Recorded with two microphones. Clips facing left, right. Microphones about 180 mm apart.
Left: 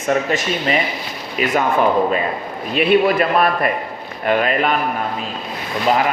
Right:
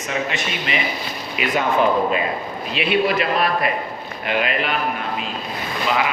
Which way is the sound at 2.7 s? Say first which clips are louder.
Left 5 dB; 50° left (ahead or behind).